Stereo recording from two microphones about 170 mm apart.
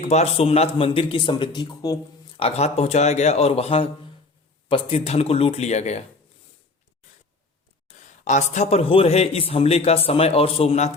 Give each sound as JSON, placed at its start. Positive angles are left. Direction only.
{"t": 0.0, "sound": "a man's voice", "side_deg": 40}
{"t": 2.4, "sound": "a man's voice", "side_deg": 40}
{"t": 7.9, "sound": "a man's voice", "side_deg": 45}